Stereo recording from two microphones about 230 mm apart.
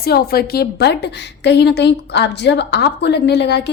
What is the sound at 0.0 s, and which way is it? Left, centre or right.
A woman's voice, left.